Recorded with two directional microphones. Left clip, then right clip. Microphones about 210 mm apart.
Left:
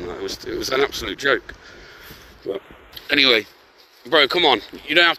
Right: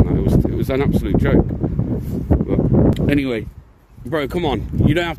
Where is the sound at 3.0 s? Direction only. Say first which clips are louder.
Left 4 dB; 10° right (ahead or behind).